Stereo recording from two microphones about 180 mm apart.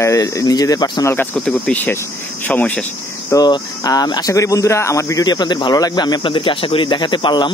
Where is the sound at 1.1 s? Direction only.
10° left (ahead or behind).